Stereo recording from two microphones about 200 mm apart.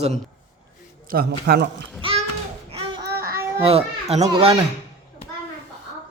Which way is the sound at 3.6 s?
30° right (ahead or behind).